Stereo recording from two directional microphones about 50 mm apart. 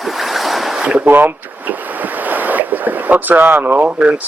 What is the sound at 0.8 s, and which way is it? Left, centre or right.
Speech, right.